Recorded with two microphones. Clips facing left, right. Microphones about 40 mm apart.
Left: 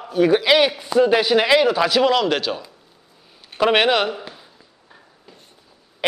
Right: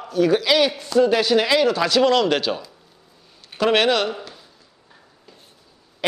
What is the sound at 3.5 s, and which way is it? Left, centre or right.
Speech, centre.